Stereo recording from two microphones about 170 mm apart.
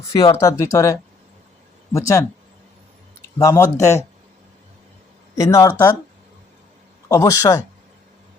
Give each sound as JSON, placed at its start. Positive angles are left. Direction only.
{"t": 0.1, "sound": "speech", "side_deg": 30}
{"t": 0.4, "sound": "speech", "side_deg": 15}
{"t": 3.3, "sound": "speech", "side_deg": 20}
{"t": 5.4, "sound": "speech", "side_deg": 20}
{"t": 7.1, "sound": "speech", "side_deg": 20}